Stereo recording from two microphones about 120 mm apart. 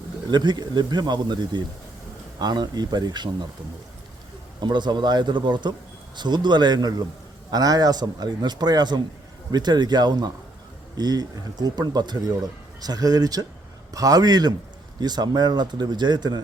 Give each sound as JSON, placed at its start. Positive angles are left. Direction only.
{"t": 0.3, "sound": "speech", "side_deg": -35}
{"t": 4.6, "sound": "speech", "side_deg": -40}